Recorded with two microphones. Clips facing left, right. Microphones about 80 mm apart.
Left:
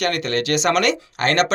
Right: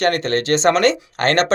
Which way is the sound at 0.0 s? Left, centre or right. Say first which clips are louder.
Right 3 dB; right.